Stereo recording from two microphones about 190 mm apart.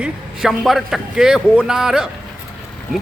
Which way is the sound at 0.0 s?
Centre (ahead or behind).